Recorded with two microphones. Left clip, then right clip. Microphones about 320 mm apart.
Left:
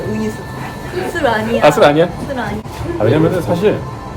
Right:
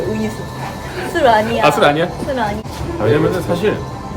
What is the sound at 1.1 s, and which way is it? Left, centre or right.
Speech, centre.